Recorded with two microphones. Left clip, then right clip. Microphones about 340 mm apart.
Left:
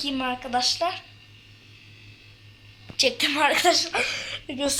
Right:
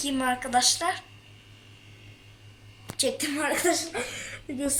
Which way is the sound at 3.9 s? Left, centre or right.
Left.